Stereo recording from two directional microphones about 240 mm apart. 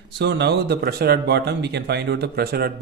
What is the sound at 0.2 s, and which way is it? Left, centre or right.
Speech, right.